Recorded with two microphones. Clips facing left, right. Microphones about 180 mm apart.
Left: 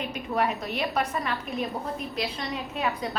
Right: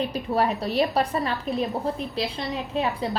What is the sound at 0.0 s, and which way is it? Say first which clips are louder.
A woman's voice: right 4 dB; 35° right (ahead or behind).